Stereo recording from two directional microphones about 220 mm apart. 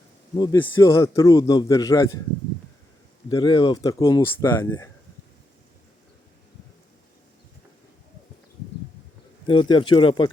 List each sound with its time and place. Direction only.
0.3 s a man's voice: 15° left (ahead or behind)
3.2 s a man's voice: 20° left (ahead or behind)
9.5 s speech: 20° left (ahead or behind)